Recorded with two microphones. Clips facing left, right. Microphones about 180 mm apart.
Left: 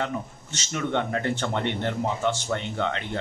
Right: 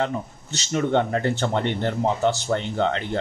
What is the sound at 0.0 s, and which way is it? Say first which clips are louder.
Speech: right 4 dB; 35° right (ahead or behind).